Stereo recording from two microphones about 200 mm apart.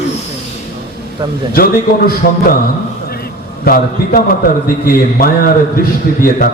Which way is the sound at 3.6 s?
45° left (ahead or behind).